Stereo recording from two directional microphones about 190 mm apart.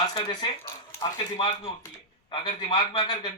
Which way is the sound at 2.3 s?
25° left (ahead or behind).